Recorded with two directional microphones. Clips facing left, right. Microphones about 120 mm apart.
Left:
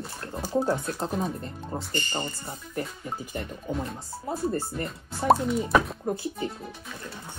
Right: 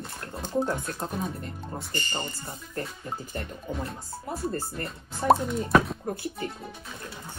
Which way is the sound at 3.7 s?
15° left (ahead or behind).